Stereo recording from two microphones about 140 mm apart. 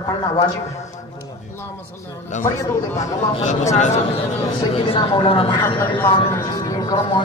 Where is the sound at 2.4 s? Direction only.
15° left (ahead or behind).